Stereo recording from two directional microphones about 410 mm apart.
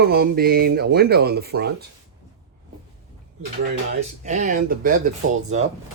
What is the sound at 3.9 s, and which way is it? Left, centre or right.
Speech, centre.